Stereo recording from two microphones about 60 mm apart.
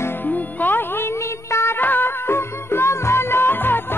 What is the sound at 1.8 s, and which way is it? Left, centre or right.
Music, left.